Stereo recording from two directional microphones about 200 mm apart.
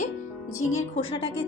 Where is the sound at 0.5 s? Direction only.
90° left.